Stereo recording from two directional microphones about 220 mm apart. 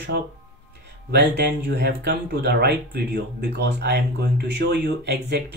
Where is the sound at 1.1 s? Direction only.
50° right (ahead or behind).